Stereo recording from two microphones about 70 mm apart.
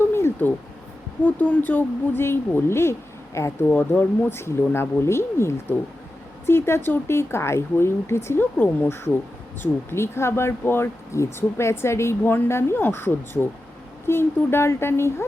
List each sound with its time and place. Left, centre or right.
0.1 s a sound: left
1.2 s a woman's voice: left
3.6 s a woman's voice: left
4.3 s a woman's voice: left
9.9 s a woman's voice: left